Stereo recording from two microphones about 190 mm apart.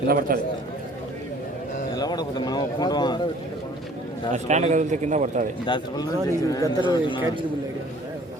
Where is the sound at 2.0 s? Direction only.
20° left (ahead or behind).